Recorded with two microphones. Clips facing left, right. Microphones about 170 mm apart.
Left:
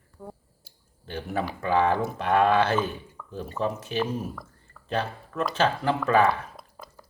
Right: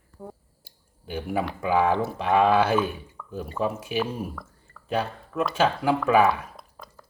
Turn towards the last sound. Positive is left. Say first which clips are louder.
# even
turn(degrees=0)  # may be behind; listen again after turning